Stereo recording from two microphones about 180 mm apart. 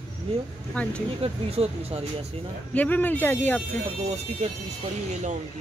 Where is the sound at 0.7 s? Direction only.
5° left (ahead or behind).